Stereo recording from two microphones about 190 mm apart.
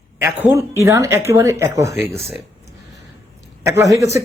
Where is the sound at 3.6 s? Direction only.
15° right (ahead or behind).